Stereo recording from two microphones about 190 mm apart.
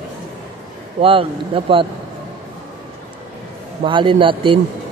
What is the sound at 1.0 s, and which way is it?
Speech, 30° right (ahead or behind).